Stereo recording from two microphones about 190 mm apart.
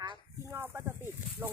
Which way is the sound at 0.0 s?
15° right (ahead or behind).